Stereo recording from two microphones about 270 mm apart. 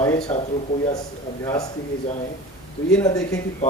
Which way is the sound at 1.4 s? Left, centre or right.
Centre.